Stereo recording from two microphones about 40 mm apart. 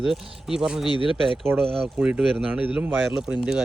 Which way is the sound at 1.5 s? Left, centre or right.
Right.